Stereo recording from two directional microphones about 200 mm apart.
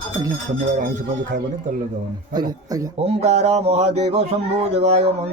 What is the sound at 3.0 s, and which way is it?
Speech, 35° right (ahead or behind).